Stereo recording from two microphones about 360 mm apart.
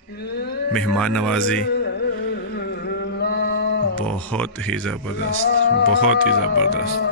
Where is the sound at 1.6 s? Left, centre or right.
Left.